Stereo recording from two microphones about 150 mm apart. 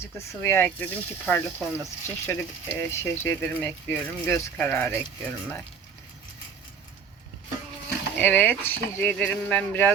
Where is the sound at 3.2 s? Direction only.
15° left (ahead or behind).